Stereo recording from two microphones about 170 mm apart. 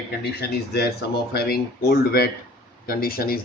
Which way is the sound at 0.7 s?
65° left (ahead or behind).